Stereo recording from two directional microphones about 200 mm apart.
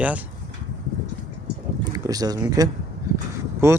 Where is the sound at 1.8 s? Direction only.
20° right (ahead or behind).